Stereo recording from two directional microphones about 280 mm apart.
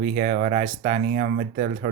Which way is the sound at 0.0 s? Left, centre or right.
Right.